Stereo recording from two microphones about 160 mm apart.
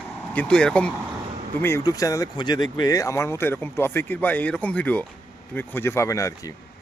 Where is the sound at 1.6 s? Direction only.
20° left (ahead or behind).